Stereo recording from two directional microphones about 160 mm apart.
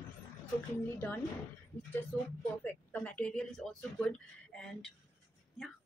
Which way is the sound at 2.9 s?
10° left (ahead or behind).